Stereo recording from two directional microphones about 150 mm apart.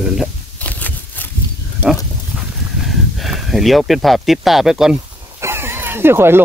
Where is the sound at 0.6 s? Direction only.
10° left (ahead or behind).